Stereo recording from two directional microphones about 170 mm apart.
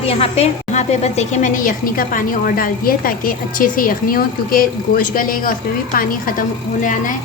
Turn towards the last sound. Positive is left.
turn(degrees=50)  # may be behind; listen again after turning